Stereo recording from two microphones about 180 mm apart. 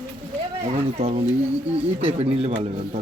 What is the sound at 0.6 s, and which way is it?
Speech, 35° right (ahead or behind).